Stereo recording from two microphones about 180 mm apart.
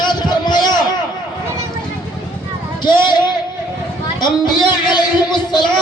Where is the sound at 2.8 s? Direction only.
25° left (ahead or behind).